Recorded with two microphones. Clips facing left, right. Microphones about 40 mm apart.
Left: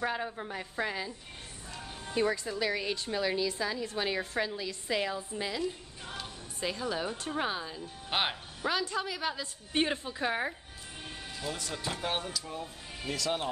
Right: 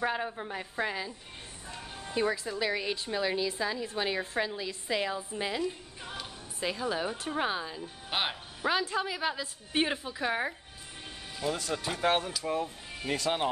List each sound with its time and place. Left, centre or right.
0.0 s a woman's voice: centre
8.1 s speech: centre
8.6 s speech: centre
11.7 s speech: centre
13.1 s speech: right